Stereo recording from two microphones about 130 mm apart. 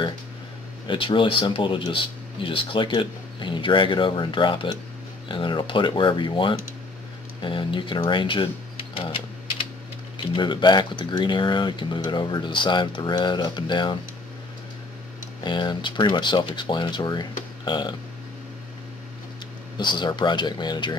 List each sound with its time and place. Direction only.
0.8 s speech: 40° left (ahead or behind)
8.9 s typewriter: 45° left (ahead or behind)
10.1 s speech: 35° left (ahead or behind)
15.4 s speech: 35° left (ahead or behind)
19.8 s speech: 35° left (ahead or behind)